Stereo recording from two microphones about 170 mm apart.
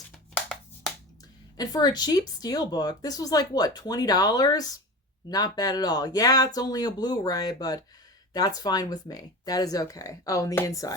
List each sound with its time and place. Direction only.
0.3 s finger snapping: 5° left (ahead or behind)
1.5 s speech: 25° left (ahead or behind)